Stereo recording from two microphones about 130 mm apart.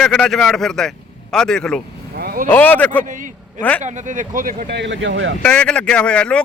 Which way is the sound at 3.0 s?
75° right (ahead or behind).